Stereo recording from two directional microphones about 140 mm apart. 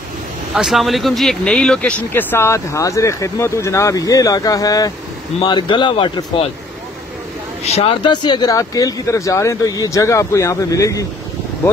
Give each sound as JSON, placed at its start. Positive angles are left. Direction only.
{"t": 0.6, "sound": "speech", "side_deg": 0}
{"t": 7.6, "sound": "speech", "side_deg": 45}